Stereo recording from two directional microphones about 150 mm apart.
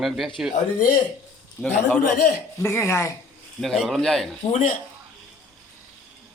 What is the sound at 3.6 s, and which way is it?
Speech, centre (ahead or behind).